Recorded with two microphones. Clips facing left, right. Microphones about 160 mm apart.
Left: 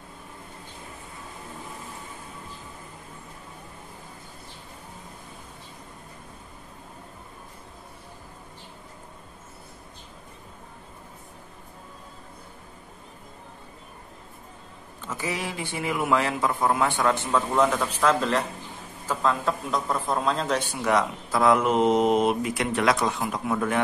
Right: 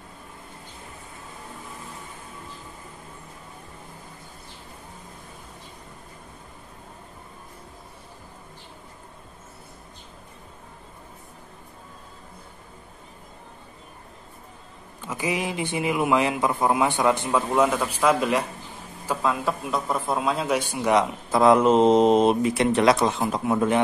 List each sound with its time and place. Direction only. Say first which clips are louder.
15.0 s a man's voice: right 4 dB; 15° right (ahead or behind)